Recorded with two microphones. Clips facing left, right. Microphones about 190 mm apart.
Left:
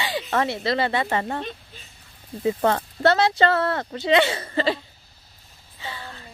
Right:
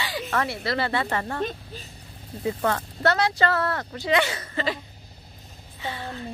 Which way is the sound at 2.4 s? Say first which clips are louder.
Left 4 dB; 25° left (ahead or behind).